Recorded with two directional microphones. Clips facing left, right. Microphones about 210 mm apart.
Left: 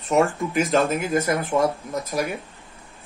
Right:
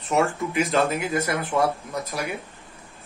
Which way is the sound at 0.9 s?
45° left (ahead or behind).